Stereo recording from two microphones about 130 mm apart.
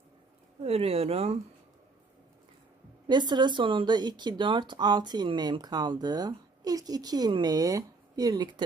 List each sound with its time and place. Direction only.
0.7 s speech: 50° right (ahead or behind)
3.1 s speech: 35° right (ahead or behind)